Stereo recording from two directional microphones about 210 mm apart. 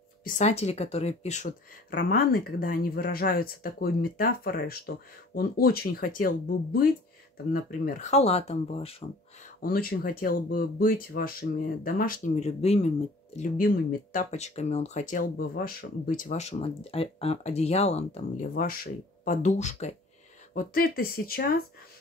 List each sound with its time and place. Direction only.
0.2 s speech: 35° left (ahead or behind)
9.6 s speech: 45° left (ahead or behind)
14.1 s speech: 30° left (ahead or behind)